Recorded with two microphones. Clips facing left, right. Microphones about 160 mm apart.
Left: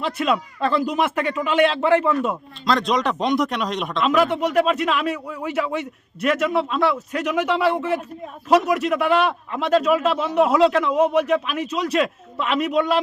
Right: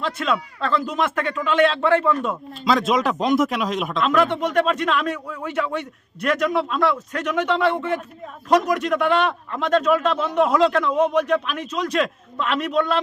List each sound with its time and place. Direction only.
0.0 s a man's voice: 10° left (ahead or behind)
2.6 s a man's voice: 5° right (ahead or behind)